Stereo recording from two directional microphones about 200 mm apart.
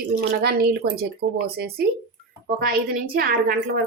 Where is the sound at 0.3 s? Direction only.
50° right (ahead or behind).